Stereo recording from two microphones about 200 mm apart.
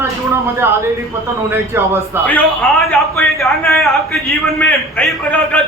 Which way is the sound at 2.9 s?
10° left (ahead or behind).